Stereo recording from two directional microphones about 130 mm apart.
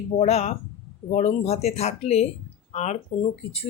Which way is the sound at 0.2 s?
55° left (ahead or behind).